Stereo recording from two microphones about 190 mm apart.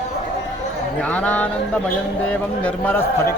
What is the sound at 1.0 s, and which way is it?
Speech, 5° left (ahead or behind).